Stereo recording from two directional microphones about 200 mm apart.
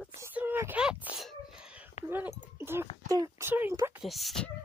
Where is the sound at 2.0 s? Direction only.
10° right (ahead or behind).